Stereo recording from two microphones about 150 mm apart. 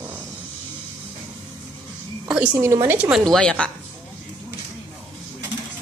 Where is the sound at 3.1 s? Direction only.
5° left (ahead or behind).